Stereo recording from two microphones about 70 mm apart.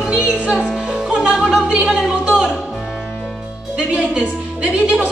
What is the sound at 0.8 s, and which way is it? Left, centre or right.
Music, centre.